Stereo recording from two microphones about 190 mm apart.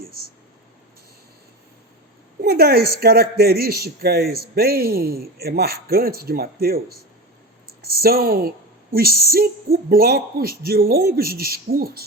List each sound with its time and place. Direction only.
2.4 s speech: 55° right (ahead or behind)
8.0 s speech: 50° right (ahead or behind)